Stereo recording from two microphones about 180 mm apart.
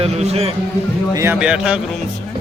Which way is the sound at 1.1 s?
10° right (ahead or behind).